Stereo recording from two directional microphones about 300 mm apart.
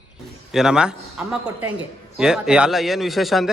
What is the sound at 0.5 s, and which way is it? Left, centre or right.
A man's voice, centre.